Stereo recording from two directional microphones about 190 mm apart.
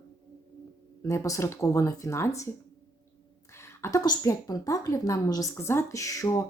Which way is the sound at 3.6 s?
15° left (ahead or behind).